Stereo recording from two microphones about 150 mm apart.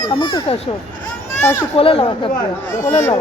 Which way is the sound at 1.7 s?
40° left (ahead or behind).